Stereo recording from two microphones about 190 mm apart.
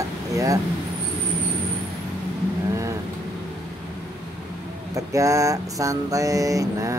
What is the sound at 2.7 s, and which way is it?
Vehicle, 15° right (ahead or behind).